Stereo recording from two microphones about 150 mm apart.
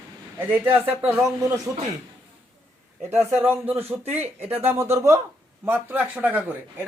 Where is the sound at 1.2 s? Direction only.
20° right (ahead or behind).